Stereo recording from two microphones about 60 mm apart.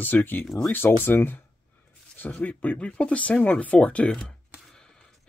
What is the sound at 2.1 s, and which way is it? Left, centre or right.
Speech, left.